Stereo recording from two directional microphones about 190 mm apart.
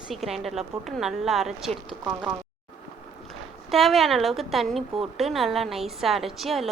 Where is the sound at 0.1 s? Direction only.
Centre (ahead or behind).